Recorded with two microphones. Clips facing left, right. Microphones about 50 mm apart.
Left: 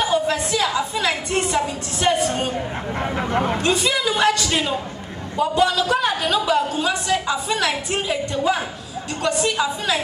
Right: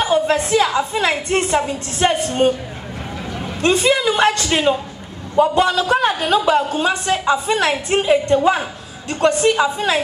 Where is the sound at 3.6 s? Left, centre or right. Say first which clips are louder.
Right 5 dB; right.